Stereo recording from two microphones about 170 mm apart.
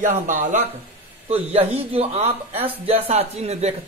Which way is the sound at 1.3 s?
35° right (ahead or behind).